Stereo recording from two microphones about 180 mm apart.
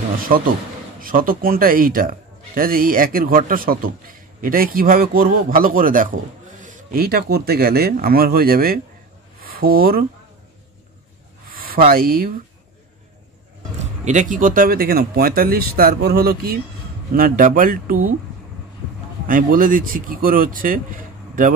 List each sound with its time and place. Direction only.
1.0 s a man's voice: 50° right (ahead or behind)
11.4 s a sound: 55° right (ahead or behind)
14.3 s a man's voice: 50° right (ahead or behind)
19.2 s a man's voice: 50° right (ahead or behind)